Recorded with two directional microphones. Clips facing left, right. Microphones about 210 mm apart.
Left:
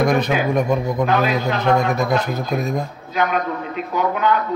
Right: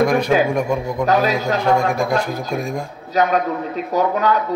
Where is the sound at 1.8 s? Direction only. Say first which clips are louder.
Even; 10° right (ahead or behind).